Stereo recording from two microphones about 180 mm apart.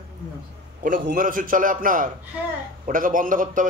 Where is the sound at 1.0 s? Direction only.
50° right (ahead or behind).